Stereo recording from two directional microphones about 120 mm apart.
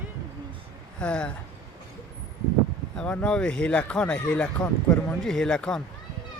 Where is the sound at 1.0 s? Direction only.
10° left (ahead or behind).